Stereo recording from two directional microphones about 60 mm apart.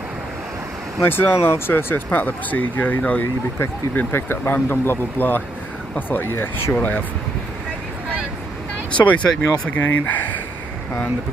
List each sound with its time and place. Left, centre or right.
1.0 s speech: left
4.1 s speech: left
8.9 s speech: left